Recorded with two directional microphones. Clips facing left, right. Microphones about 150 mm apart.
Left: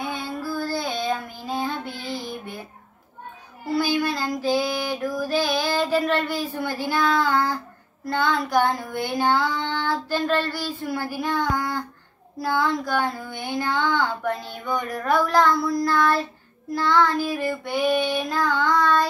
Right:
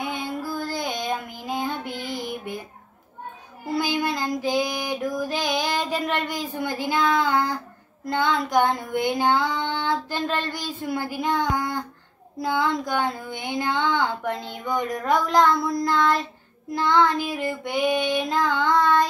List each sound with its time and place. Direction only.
0.0 s child singing: 20° right (ahead or behind)
3.6 s child singing: 20° right (ahead or behind)
8.0 s a sound: 20° right (ahead or behind)